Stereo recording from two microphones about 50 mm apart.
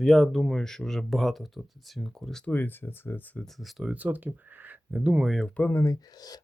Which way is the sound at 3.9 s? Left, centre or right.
Right.